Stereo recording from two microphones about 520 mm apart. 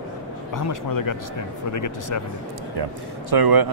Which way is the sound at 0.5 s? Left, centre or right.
Left.